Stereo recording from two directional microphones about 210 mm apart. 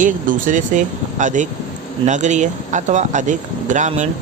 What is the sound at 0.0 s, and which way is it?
Speech, 40° right (ahead or behind).